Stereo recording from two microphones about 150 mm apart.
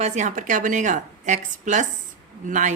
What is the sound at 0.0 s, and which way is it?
A woman's voice, 50° right (ahead or behind).